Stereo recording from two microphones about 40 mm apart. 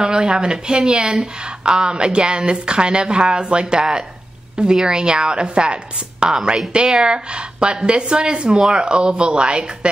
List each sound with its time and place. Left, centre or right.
0.0 s speech: centre